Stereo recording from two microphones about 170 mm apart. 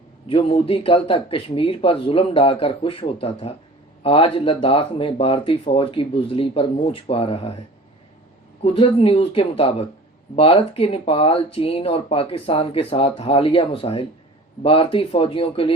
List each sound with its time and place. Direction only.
0.3 s speech: 30° left (ahead or behind)
8.6 s speech: 35° left (ahead or behind)